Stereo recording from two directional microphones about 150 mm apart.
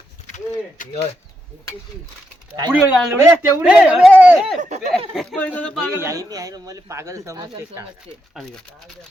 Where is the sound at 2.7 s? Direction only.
5° right (ahead or behind).